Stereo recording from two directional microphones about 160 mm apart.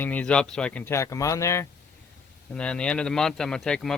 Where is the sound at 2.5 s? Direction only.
5° left (ahead or behind).